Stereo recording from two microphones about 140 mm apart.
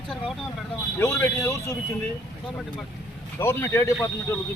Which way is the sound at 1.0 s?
15° left (ahead or behind).